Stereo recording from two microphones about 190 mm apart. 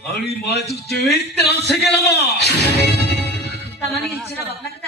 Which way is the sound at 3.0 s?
60° left (ahead or behind).